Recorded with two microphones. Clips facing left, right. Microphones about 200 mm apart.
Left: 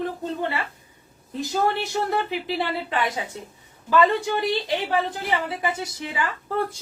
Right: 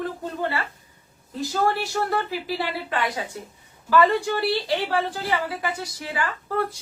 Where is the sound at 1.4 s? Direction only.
20° left (ahead or behind).